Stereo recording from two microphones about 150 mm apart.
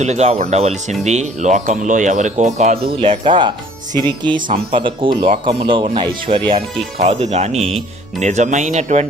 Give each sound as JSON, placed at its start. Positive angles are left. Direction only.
{"t": 0.0, "sound": "speech", "side_deg": -50}
{"t": 4.4, "sound": "speech", "side_deg": -65}
{"t": 4.7, "sound": "speech", "side_deg": -35}